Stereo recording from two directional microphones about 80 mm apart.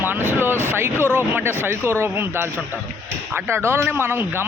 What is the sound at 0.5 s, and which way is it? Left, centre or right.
Speech, left.